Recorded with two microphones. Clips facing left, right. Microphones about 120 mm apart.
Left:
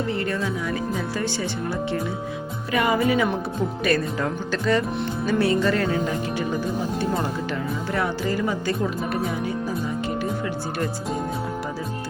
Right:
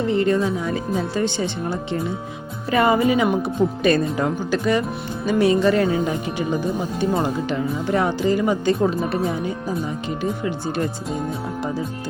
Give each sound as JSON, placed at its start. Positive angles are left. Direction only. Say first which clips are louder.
{"t": 0.1, "sound": "speech", "louder": "right 7 dB", "side_deg": -20}